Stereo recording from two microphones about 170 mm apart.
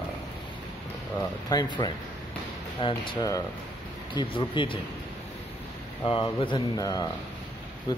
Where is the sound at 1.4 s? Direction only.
25° left (ahead or behind).